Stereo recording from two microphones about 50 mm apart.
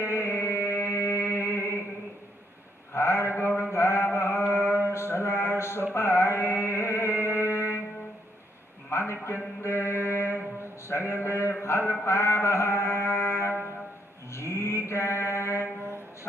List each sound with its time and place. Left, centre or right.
0.0 s music: left
2.9 s a sound: left
3.7 s mantra: left
5.9 s music: left
8.9 s a sound: left
9.6 s mantra: left
10.9 s speech: left
11.6 s music: left
14.3 s mantra: left